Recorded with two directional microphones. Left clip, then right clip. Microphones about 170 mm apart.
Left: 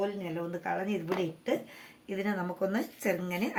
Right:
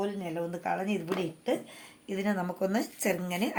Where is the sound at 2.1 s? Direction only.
30° right (ahead or behind).